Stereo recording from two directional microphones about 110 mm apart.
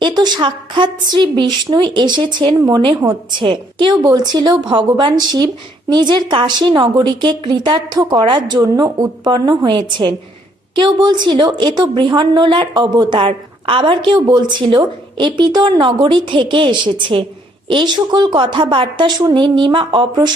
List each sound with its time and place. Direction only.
0.0 s a woman's voice: 40° right (ahead or behind)
3.4 s a woman's voice: 45° right (ahead or behind)